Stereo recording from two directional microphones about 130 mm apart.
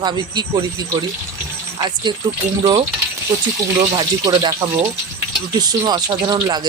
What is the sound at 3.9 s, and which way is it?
Speech, 35° right (ahead or behind).